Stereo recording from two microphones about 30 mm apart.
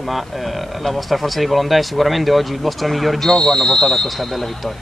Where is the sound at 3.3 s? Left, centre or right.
Centre.